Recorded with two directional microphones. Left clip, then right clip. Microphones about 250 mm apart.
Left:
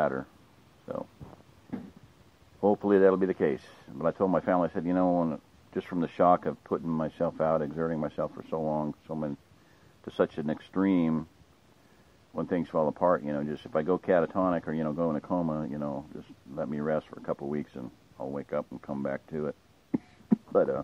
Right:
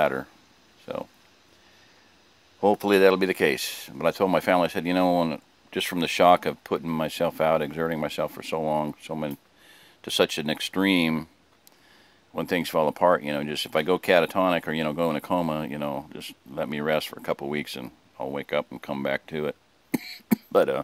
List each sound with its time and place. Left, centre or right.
0.0 s speech: right
0.9 s pig: centre
2.6 s speech: centre
12.4 s speech: centre